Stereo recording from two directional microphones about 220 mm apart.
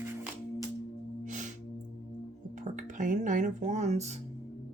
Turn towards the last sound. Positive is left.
turn(degrees=-30)  # may be behind; listen again after turning